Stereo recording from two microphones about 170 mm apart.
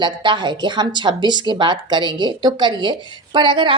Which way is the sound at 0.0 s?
25° right (ahead or behind).